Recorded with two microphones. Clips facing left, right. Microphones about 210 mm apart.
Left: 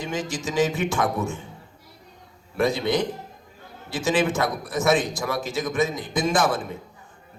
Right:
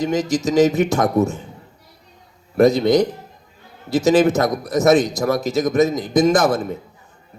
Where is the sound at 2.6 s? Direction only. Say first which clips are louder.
Right 9 dB; 40° right (ahead or behind).